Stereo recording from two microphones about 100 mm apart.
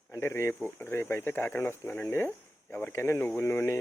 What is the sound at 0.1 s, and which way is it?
Speech, 25° left (ahead or behind).